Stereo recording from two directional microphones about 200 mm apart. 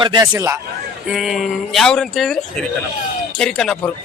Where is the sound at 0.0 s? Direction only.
20° right (ahead or behind).